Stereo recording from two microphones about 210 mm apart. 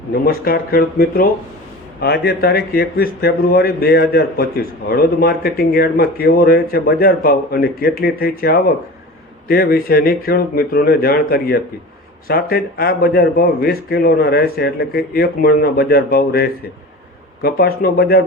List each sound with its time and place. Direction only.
0.1 s a man's voice: 45° left (ahead or behind)